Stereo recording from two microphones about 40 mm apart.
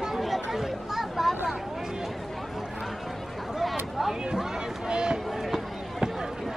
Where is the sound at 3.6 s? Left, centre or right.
Centre.